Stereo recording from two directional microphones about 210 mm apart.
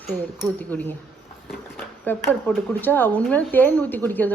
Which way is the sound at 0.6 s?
10° left (ahead or behind).